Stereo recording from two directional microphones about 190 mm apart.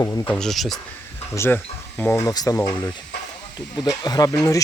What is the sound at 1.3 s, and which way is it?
Speech, 10° left (ahead or behind).